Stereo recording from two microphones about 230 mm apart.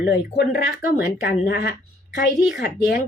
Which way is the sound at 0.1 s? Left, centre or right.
Left.